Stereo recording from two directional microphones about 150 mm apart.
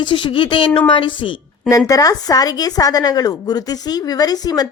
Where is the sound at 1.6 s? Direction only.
20° left (ahead or behind).